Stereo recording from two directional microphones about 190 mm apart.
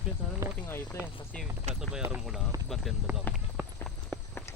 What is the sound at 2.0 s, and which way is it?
Speech, 5° right (ahead or behind).